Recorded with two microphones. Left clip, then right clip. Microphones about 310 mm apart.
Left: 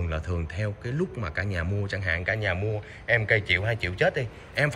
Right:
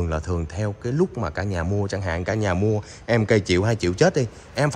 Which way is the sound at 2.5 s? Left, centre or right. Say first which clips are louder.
Right 6 dB; right.